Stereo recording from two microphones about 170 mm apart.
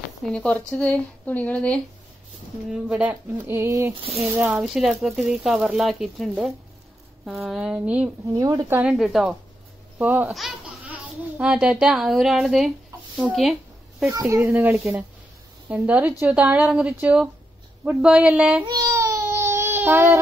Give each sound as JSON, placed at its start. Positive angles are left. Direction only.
{"t": 0.2, "sound": "speech", "side_deg": 5}
{"t": 2.7, "sound": "a woman's voice", "side_deg": -10}
{"t": 8.3, "sound": "a woman's voice", "side_deg": -20}
{"t": 8.7, "sound": "speech", "side_deg": -5}
{"t": 14.0, "sound": "a woman's voice", "side_deg": -15}
{"t": 18.7, "sound": "child singing", "side_deg": -20}